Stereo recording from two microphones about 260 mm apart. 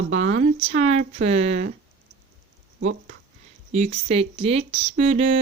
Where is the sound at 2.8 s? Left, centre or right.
Right.